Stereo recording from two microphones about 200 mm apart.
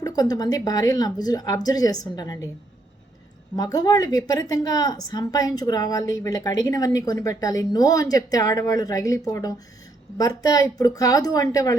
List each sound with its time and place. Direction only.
0.0 s a woman's voice: 20° left (ahead or behind)
3.5 s a woman's voice: 20° left (ahead or behind)